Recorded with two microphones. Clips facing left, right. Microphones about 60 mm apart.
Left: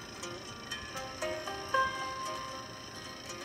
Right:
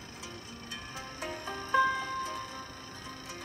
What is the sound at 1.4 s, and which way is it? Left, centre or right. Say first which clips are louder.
Music: right 5 dB; right.